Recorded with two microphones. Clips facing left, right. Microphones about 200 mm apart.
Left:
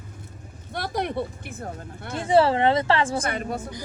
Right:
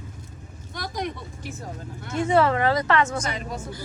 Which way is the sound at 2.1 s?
30° left (ahead or behind).